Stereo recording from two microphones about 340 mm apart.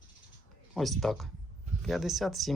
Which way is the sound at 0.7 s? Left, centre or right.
Centre.